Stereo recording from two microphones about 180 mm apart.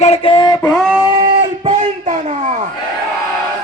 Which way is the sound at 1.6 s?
40° right (ahead or behind).